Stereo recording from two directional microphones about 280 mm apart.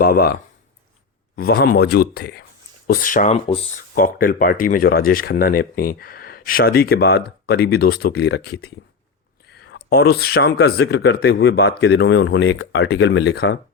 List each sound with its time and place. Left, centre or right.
0.0 s speech: left
1.4 s speech: left
3.9 s speech: left